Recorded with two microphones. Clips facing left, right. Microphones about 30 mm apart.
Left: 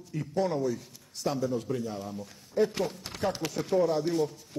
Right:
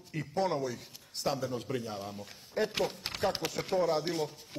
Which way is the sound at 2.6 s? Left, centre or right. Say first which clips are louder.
Left 6 dB; right.